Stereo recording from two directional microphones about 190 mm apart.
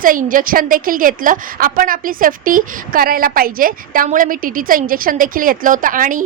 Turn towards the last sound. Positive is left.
turn(degrees=-45)  # may be behind; listen again after turning